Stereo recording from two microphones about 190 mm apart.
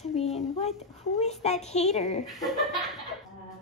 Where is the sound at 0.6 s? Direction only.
35° left (ahead or behind).